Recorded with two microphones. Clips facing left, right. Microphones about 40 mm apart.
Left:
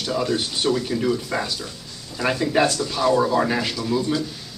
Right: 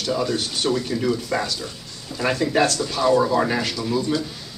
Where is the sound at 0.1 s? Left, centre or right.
Centre.